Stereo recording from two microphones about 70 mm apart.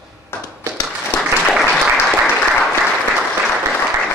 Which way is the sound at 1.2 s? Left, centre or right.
Centre.